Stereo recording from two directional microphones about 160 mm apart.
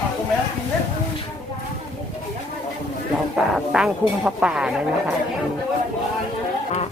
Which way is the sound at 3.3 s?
5° right (ahead or behind).